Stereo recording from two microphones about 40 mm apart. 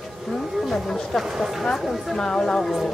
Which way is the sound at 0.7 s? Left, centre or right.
Centre.